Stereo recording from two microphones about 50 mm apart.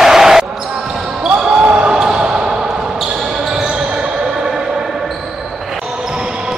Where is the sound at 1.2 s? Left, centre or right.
Right.